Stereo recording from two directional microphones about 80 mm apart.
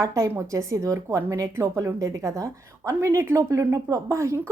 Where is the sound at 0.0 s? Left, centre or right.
Right.